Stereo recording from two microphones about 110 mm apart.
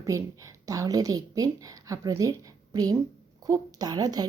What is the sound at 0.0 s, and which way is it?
A woman's voice, 30° right (ahead or behind).